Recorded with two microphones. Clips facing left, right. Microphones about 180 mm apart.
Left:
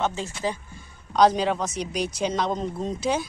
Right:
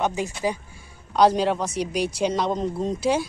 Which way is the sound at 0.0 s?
15° right (ahead or behind).